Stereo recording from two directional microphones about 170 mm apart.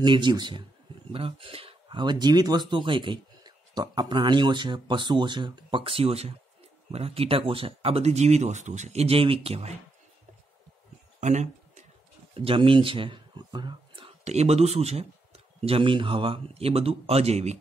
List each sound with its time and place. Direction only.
0.0 s speech: 25° right (ahead or behind)
11.1 s a sound: 45° right (ahead or behind)
12.4 s speech: 30° right (ahead or behind)